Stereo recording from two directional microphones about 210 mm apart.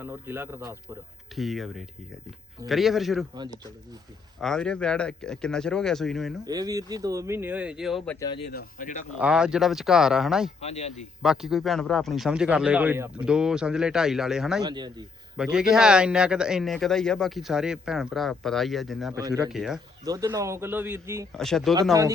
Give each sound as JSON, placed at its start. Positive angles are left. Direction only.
{"t": 0.0, "sound": "speech", "side_deg": -10}
{"t": 1.4, "sound": "speech", "side_deg": 0}
{"t": 4.4, "sound": "speech", "side_deg": 0}
{"t": 6.4, "sound": "speech", "side_deg": -15}
{"t": 8.4, "sound": "speech", "side_deg": 40}
{"t": 9.1, "sound": "speech", "side_deg": -5}
{"t": 10.6, "sound": "speech", "side_deg": 30}
{"t": 11.2, "sound": "speech", "side_deg": 0}
{"t": 14.6, "sound": "speech", "side_deg": -20}
{"t": 15.4, "sound": "speech", "side_deg": -5}
{"t": 19.1, "sound": "speech", "side_deg": -15}
{"t": 19.5, "sound": "speech", "side_deg": 0}
{"t": 20.1, "sound": "speech", "side_deg": -15}
{"t": 21.3, "sound": "speech", "side_deg": 0}